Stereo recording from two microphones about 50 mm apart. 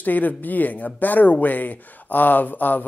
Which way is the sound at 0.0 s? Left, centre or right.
Left.